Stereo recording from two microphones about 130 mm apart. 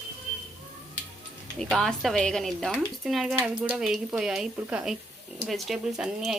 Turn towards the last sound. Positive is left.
turn(degrees=-5)  # may be behind; listen again after turning